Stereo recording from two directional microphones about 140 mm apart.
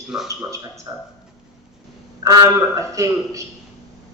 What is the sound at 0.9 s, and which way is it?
Speech, 15° right (ahead or behind).